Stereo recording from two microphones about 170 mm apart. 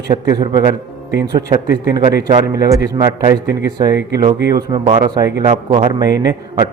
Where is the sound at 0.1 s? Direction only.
25° right (ahead or behind).